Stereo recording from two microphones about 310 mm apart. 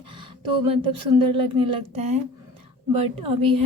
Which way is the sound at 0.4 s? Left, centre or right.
Centre.